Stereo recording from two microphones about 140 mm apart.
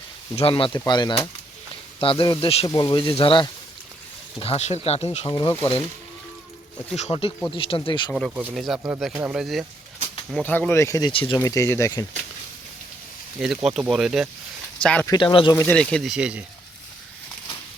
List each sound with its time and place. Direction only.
0.3 s speech: 40° left (ahead or behind)
5.3 s speech: 30° left (ahead or behind)
6.9 s speech: 45° left (ahead or behind)
8.5 s speech: centre (ahead or behind)
10.3 s speech: 10° left (ahead or behind)
11.1 s speech: 40° left (ahead or behind)
11.3 s speech: 20° left (ahead or behind)
13.4 s speech: 5° right (ahead or behind)
14.8 s speech: 5° left (ahead or behind)
15.0 s speech: 30° left (ahead or behind)
15.7 s speech: 5° left (ahead or behind)